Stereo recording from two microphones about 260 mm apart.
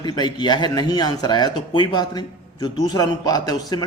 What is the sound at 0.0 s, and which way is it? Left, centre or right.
A man's voice, centre.